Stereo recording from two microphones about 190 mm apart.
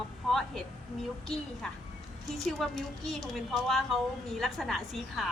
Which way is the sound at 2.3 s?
Centre (ahead or behind).